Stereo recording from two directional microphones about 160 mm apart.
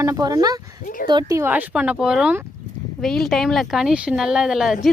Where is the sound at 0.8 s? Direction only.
60° left (ahead or behind).